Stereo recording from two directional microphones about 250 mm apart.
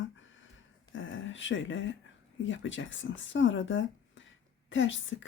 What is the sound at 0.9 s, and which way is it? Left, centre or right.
Speech, left.